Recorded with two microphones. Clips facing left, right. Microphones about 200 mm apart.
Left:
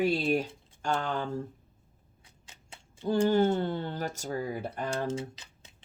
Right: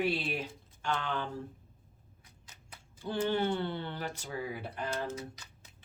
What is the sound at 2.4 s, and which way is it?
Tick-tock, 25° left (ahead or behind).